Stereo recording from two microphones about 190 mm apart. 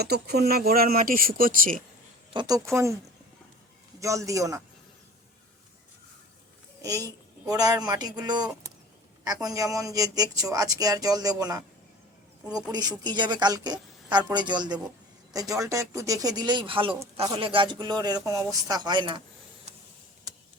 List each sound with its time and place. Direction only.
0.0 s speech: 60° right (ahead or behind)
2.3 s a man's voice: 25° right (ahead or behind)
4.0 s a man's voice: 15° right (ahead or behind)
6.8 s a woman's voice: 20° right (ahead or behind)